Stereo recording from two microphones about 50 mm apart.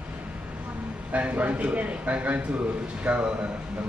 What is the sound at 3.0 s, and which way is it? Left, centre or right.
Speech, right.